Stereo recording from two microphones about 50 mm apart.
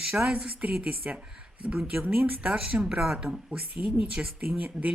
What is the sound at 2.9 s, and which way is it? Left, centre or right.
Speech, centre.